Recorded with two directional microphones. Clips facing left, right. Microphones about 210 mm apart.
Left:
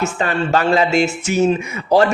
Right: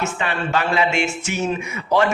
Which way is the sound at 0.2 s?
40° left (ahead or behind).